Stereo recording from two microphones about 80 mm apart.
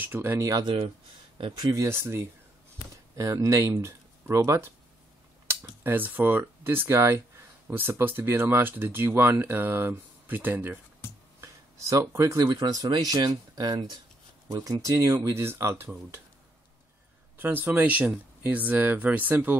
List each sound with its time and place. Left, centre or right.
0.0 s speech: right
0.4 s speech: right
1.8 s speech: right
11.4 s a sound: right
12.4 s speech: right
14.6 s speech: right
15.3 s speech: right
17.4 s speech: right